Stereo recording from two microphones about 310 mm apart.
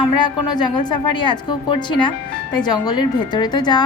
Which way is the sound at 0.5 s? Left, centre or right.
Centre.